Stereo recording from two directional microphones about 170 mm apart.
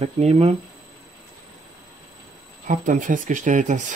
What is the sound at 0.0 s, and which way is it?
Speech, 40° right (ahead or behind).